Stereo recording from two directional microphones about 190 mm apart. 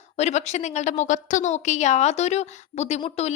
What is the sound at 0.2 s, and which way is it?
A woman's voice, 35° left (ahead or behind).